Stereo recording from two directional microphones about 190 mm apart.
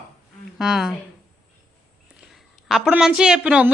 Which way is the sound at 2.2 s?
Centre (ahead or behind).